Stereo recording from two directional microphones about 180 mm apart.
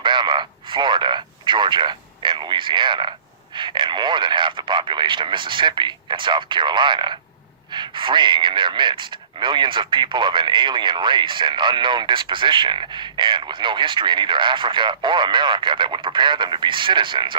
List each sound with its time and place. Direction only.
0.0 s a man's voice: 25° right (ahead or behind)